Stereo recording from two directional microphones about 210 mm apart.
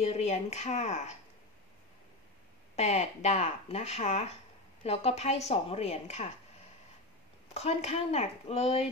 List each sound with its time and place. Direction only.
0.0 s speech: 30° left (ahead or behind)
2.7 s speech: 30° left (ahead or behind)
7.5 s speech: 30° left (ahead or behind)